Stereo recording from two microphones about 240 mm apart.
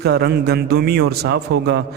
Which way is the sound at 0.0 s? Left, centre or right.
Right.